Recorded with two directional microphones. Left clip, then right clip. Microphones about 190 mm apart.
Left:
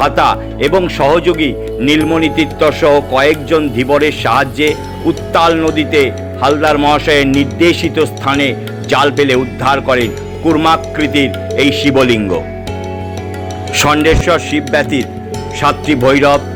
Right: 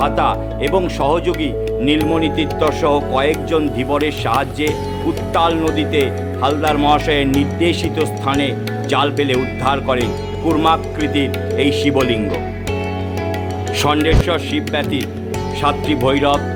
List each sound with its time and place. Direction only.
0.0 s speech: 10° left (ahead or behind)
13.7 s speech: 15° left (ahead or behind)